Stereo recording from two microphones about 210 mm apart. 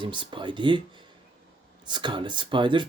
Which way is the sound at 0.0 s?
25° right (ahead or behind).